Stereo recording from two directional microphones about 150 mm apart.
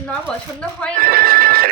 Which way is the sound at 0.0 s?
5° left (ahead or behind).